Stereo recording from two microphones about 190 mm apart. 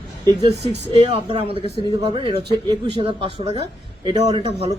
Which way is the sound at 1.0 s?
30° right (ahead or behind).